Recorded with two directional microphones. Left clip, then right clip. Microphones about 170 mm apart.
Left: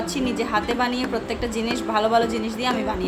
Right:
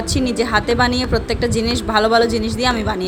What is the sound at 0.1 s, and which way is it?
A woman's voice, 40° right (ahead or behind).